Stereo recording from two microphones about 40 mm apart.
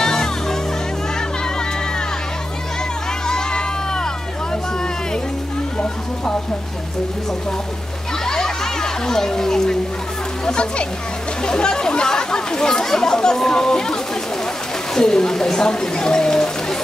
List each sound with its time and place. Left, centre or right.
0.0 s music: centre
3.3 s crowd: centre
8.3 s a sound: centre
10.4 s a child's voice: left
15.0 s speech: centre